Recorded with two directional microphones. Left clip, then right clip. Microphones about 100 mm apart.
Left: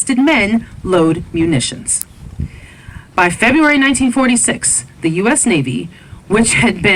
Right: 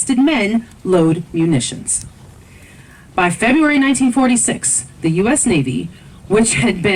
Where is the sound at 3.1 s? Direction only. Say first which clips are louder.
Left 3 dB; 40° left (ahead or behind).